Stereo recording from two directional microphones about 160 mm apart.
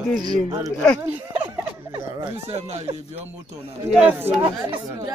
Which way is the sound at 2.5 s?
45° right (ahead or behind).